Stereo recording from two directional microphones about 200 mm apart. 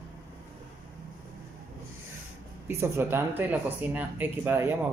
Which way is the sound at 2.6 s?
10° right (ahead or behind).